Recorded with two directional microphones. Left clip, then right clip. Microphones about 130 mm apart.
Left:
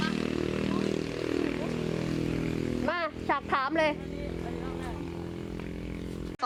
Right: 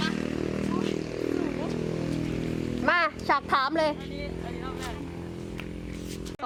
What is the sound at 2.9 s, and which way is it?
Music, 30° right (ahead or behind).